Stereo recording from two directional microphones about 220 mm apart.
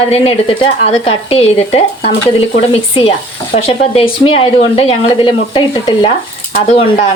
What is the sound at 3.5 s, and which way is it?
Speech, 25° left (ahead or behind).